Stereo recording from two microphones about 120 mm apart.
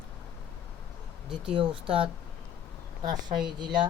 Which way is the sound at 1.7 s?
45° right (ahead or behind).